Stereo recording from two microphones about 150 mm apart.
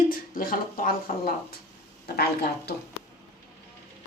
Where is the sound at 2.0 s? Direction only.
90° left.